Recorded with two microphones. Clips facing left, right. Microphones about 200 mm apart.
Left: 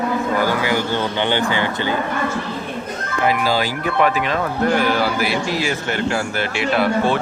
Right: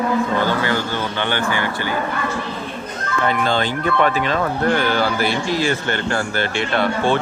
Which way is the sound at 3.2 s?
5° left (ahead or behind).